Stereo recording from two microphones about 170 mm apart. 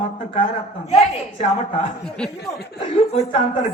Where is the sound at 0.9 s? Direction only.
40° left (ahead or behind).